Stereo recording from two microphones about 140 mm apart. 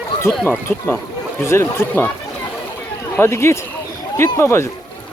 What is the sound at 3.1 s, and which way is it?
Speech, 20° left (ahead or behind).